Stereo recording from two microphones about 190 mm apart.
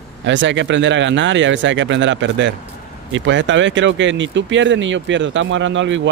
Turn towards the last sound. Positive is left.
turn(degrees=-75)  # may be behind; listen again after turning